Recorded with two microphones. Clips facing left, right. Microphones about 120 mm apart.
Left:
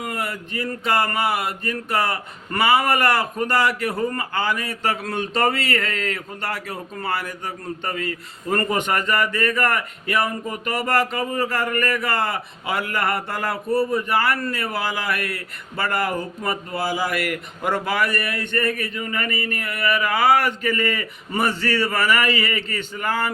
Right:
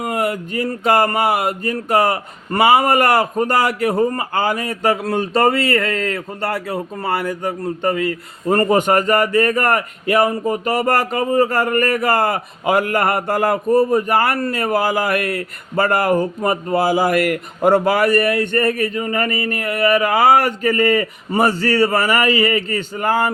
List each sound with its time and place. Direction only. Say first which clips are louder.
0.0 s speech: right 8 dB; 50° right (ahead or behind)